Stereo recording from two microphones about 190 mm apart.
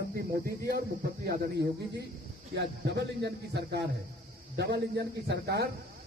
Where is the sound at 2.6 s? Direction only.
65° right (ahead or behind).